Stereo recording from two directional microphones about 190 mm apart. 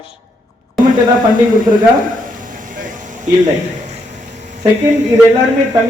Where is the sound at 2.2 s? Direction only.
45° right (ahead or behind).